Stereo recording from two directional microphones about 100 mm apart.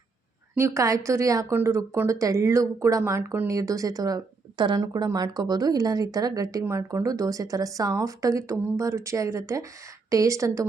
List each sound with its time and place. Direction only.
0.5 s speech: 30° right (ahead or behind)